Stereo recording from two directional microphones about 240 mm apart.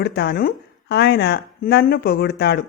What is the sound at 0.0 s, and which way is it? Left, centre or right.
Speech, left.